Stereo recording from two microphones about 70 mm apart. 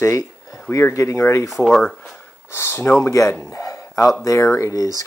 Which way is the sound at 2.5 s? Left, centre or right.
Left.